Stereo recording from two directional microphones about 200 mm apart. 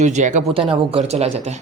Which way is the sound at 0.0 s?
35° right (ahead or behind).